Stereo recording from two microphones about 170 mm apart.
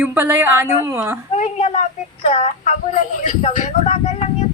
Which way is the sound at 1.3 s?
40° left (ahead or behind).